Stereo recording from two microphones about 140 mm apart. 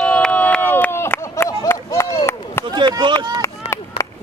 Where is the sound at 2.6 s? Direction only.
35° right (ahead or behind).